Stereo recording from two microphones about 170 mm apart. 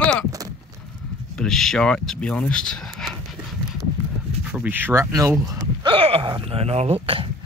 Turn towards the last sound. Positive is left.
turn(degrees=-30)  # may be behind; listen again after turning